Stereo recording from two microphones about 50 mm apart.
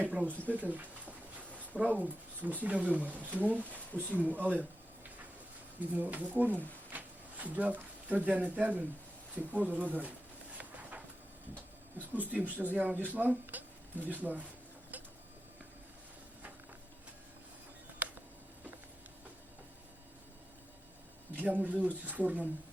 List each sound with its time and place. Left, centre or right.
0.0 s speech: right
5.8 s speech: right
10.6 s a sound: right
12.3 s speech: right
18.0 s a sound: right
21.3 s speech: right